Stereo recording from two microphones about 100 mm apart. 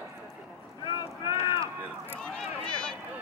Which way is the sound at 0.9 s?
50° left (ahead or behind).